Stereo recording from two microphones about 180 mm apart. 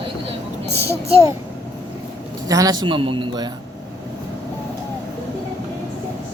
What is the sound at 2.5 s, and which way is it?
A man's voice, 20° right (ahead or behind).